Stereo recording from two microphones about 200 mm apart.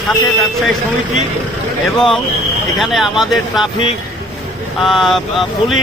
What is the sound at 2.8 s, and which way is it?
Speech, centre (ahead or behind).